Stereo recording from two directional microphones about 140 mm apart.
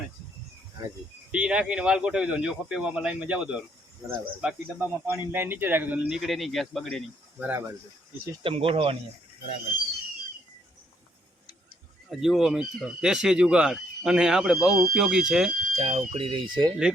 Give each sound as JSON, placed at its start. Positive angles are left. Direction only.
{"t": 1.3, "sound": "speech", "side_deg": -10}
{"t": 7.3, "sound": "speech", "side_deg": -10}
{"t": 8.4, "sound": "speech", "side_deg": -45}
{"t": 12.1, "sound": "speech", "side_deg": 0}
{"t": 15.8, "sound": "speech", "side_deg": -50}